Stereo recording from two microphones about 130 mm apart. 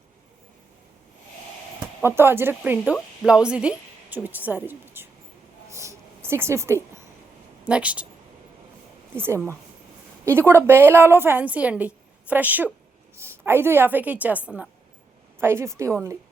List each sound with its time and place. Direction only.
2.0 s a woman's voice: 15° right (ahead or behind)
5.7 s a sound: 20° right (ahead or behind)
7.6 s speech: 10° right (ahead or behind)
9.1 s a woman's voice: 15° right (ahead or behind)
15.4 s a woman's voice: 20° right (ahead or behind)